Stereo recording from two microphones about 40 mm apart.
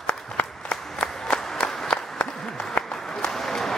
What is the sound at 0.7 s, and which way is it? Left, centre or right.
Applause, left.